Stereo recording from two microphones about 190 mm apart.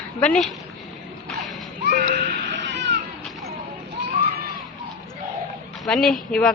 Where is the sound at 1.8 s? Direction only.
60° right (ahead or behind).